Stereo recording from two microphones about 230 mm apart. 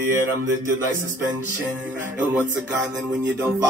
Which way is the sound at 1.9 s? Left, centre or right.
Centre.